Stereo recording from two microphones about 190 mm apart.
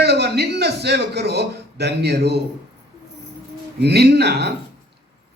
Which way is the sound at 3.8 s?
60° right (ahead or behind).